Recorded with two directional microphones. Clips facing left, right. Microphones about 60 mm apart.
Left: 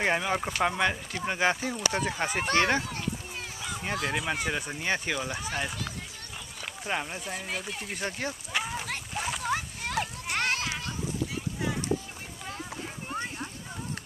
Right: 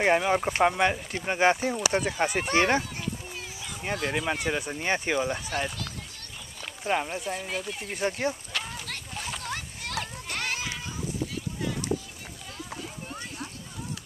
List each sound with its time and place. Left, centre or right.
0.0 s speech: centre
2.0 s speech: centre
2.5 s speech: centre
2.9 s a sound: centre
4.8 s speech: centre
6.8 s speech: centre
8.0 s speech: centre
8.8 s a sound: centre
10.4 s children playing: left
13.1 s a sound: left